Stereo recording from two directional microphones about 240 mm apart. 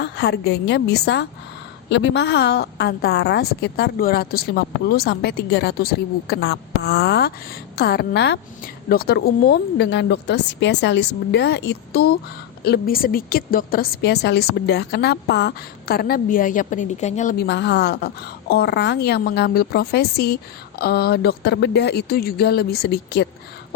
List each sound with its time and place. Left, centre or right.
0.0 s a woman's voice: left
17.4 s a woman's voice: left